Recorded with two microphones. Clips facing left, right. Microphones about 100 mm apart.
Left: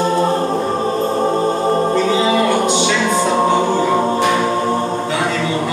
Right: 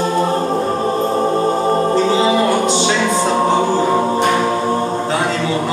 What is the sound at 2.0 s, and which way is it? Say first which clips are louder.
Music: right 1 dB; 30° right (ahead or behind).